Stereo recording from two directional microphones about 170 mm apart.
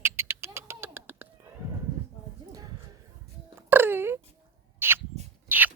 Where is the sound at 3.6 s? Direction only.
10° right (ahead or behind).